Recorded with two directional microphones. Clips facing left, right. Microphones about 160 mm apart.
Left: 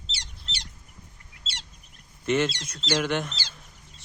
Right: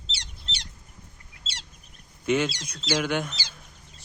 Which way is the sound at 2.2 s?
Centre (ahead or behind).